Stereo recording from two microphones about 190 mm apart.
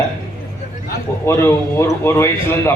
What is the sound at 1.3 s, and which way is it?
A man's voice, 15° left (ahead or behind).